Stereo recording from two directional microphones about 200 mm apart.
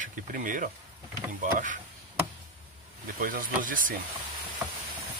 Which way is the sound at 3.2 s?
45° right (ahead or behind).